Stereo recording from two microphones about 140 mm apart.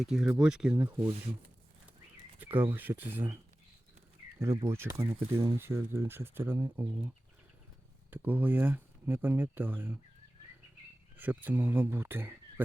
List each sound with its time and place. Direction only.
0.0 s speech: 5° right (ahead or behind)
2.4 s speech: 15° right (ahead or behind)
4.4 s speech: 20° right (ahead or behind)
8.1 s speech: 10° right (ahead or behind)
11.2 s speech: 10° right (ahead or behind)